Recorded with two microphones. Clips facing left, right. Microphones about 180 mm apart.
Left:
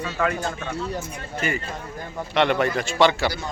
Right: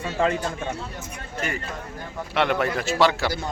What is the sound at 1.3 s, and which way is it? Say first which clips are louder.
Speech: left 2 dB; centre (ahead or behind).